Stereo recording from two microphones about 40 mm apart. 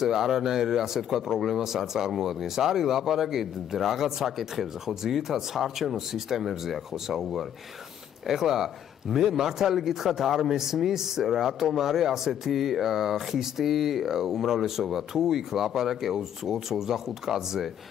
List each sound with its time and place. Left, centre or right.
0.0 s speech: centre